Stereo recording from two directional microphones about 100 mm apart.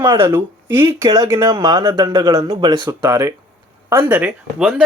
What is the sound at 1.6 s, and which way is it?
Speech, 45° right (ahead or behind).